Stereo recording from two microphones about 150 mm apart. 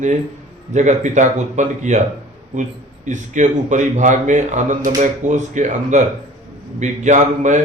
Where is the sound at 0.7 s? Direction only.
50° right (ahead or behind).